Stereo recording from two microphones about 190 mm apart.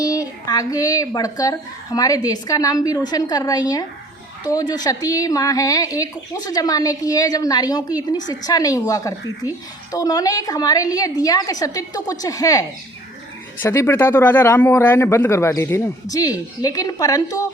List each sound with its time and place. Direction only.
0.0 s speech: 20° left (ahead or behind)